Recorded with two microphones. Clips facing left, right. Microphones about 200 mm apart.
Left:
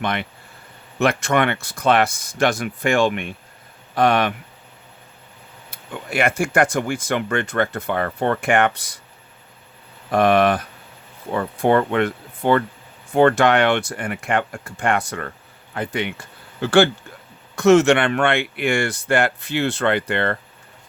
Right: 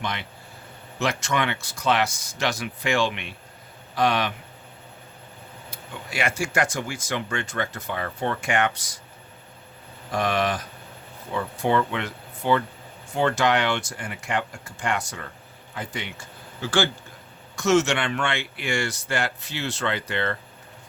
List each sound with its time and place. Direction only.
0.0 s speech: 60° left (ahead or behind)
5.7 s speech: 55° left (ahead or behind)
10.1 s speech: 55° left (ahead or behind)